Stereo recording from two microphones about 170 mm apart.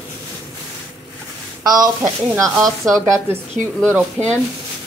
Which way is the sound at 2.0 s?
20° right (ahead or behind).